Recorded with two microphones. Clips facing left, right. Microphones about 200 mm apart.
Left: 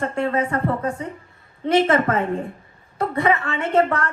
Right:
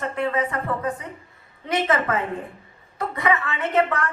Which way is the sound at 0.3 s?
30° left (ahead or behind).